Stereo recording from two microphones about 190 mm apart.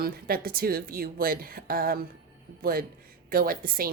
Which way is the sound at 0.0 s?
50° right (ahead or behind).